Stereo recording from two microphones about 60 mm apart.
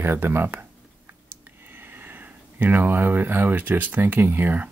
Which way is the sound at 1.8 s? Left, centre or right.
Right.